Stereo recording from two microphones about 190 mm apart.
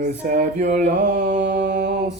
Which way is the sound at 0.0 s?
45° right (ahead or behind).